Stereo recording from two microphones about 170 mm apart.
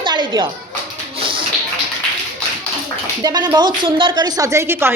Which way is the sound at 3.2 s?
25° right (ahead or behind).